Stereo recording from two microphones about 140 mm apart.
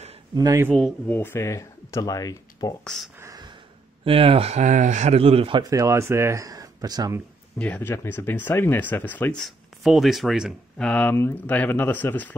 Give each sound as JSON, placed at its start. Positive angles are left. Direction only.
{"t": 0.3, "sound": "speech", "side_deg": -25}
{"t": 0.7, "sound": "speech", "side_deg": 5}
{"t": 1.1, "sound": "speech", "side_deg": 15}
{"t": 2.8, "sound": "speech", "side_deg": 5}
{"t": 3.2, "sound": "a sound", "side_deg": -25}
{"t": 4.0, "sound": "speech", "side_deg": -40}
{"t": 5.6, "sound": "speech", "side_deg": -25}
{"t": 7.5, "sound": "speech", "side_deg": 10}
{"t": 10.8, "sound": "speech", "side_deg": 10}